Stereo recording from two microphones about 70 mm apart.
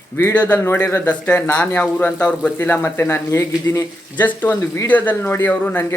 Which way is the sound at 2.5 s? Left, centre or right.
Left.